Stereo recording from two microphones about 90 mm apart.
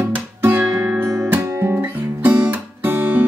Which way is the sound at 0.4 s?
25° right (ahead or behind).